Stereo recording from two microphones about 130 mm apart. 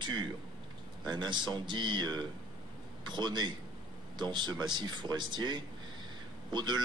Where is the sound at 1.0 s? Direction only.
35° right (ahead or behind).